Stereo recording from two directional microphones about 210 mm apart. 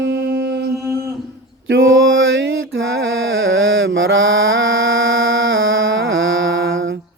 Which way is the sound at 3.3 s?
70° right (ahead or behind).